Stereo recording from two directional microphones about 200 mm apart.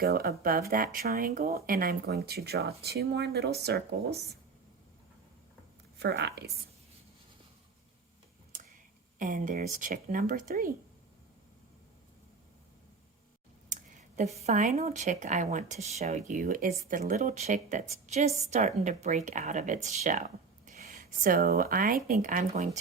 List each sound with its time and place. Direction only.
0.0 s speech: 50° right (ahead or behind)
6.0 s a woman's voice: 55° right (ahead or behind)
9.1 s speech: 40° right (ahead or behind)
13.7 s a sound: 35° right (ahead or behind)
14.4 s speech: 35° right (ahead or behind)